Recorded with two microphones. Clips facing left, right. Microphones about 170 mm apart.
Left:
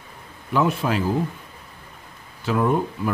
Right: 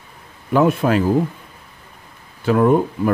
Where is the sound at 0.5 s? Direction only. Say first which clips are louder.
Right 6 dB; 50° right (ahead or behind).